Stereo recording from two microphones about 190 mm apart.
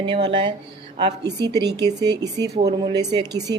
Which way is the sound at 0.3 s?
25° right (ahead or behind).